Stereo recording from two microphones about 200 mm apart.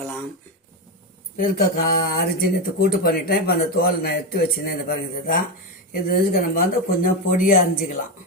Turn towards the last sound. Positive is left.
turn(degrees=45)  # may be behind; listen again after turning